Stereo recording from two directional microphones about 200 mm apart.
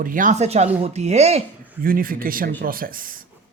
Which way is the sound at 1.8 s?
45° right (ahead or behind).